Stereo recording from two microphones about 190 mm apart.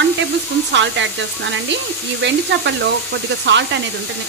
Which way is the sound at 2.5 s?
70° right (ahead or behind).